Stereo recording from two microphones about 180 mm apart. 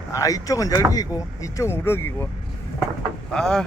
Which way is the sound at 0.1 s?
20° left (ahead or behind).